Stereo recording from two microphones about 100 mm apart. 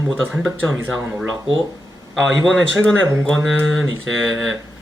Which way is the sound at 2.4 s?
5° left (ahead or behind).